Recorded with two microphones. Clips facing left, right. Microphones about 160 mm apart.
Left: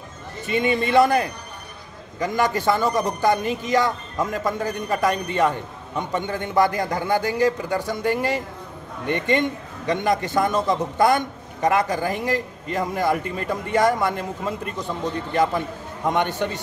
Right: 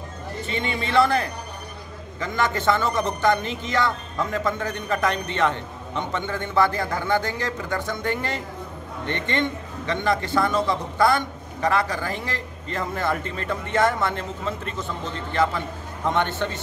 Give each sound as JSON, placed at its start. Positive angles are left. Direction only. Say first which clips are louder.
{"t": 0.5, "sound": "a man's voice", "louder": "left 7 dB", "side_deg": 15}